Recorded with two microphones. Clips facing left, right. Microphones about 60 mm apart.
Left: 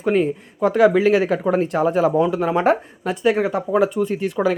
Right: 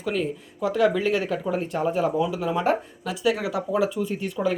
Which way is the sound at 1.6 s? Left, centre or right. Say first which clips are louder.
Left 6 dB; left.